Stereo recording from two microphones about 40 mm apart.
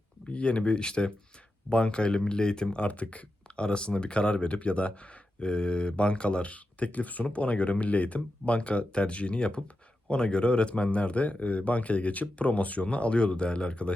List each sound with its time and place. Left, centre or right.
0.3 s speech: left